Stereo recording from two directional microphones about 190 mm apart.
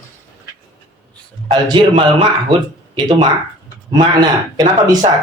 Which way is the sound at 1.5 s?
25° right (ahead or behind).